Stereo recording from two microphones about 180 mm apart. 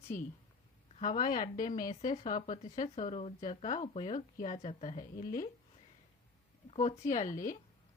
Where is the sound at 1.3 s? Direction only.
45° left (ahead or behind).